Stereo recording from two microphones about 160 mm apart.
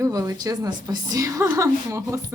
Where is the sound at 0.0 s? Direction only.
20° right (ahead or behind).